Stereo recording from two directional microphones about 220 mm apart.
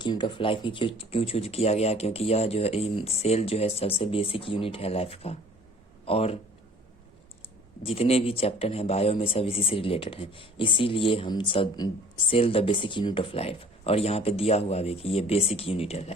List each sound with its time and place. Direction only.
0.0 s speech: 20° left (ahead or behind)
7.8 s speech: 25° left (ahead or behind)